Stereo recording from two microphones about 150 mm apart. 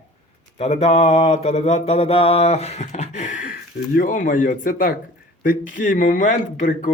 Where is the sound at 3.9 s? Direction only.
65° left (ahead or behind).